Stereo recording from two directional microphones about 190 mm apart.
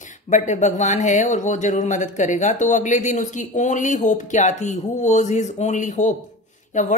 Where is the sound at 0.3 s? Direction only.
40° left (ahead or behind).